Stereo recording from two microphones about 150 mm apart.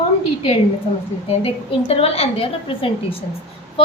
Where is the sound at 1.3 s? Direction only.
40° left (ahead or behind).